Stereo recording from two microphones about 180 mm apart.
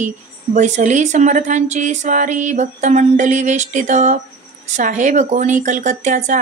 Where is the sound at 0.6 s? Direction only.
40° right (ahead or behind).